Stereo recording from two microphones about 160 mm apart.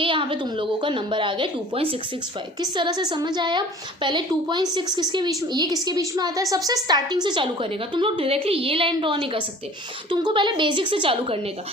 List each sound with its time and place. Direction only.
0.0 s a woman's voice: 30° right (ahead or behind)